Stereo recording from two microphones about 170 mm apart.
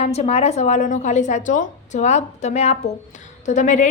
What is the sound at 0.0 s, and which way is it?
Speech, 40° left (ahead or behind).